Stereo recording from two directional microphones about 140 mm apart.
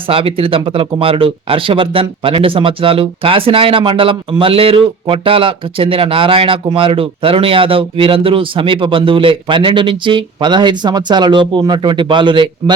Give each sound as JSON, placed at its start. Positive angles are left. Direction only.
{"t": 0.1, "sound": "speech", "side_deg": -40}